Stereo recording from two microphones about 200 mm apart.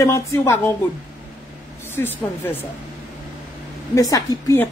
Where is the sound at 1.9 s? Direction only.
10° left (ahead or behind).